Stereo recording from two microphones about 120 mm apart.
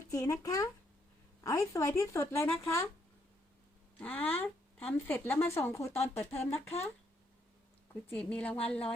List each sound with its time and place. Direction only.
0.0 s speech: 25° left (ahead or behind)
3.9 s speech: 15° left (ahead or behind)
8.0 s speech: 10° left (ahead or behind)